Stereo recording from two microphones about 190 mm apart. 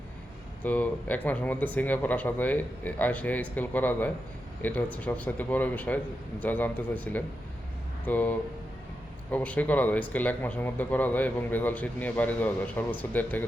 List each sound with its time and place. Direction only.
0.6 s speech: 10° left (ahead or behind)